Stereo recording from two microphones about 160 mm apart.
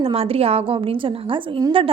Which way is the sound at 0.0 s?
35° right (ahead or behind).